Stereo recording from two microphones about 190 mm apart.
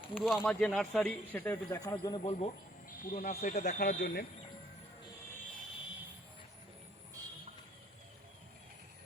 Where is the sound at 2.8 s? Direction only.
45° left (ahead or behind).